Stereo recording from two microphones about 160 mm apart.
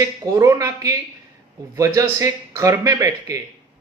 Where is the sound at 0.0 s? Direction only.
20° right (ahead or behind).